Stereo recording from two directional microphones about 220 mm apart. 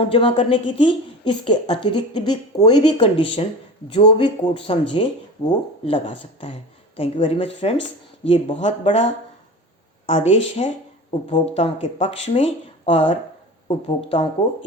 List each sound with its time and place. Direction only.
0.0 s a woman's voice: 25° left (ahead or behind)